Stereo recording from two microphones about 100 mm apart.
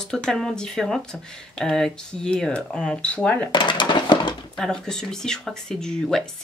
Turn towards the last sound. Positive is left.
turn(degrees=5)  # may be behind; listen again after turning